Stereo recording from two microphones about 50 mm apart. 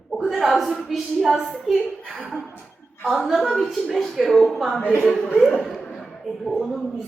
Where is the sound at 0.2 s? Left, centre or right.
Centre.